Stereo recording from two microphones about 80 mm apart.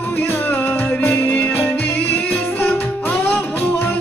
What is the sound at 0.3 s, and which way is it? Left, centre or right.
Music, left.